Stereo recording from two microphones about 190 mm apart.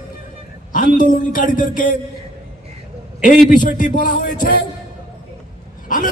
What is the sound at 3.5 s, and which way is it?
Speech, 45° left (ahead or behind).